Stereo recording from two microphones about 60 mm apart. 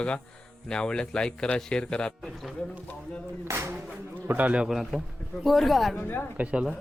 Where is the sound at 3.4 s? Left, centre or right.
Right.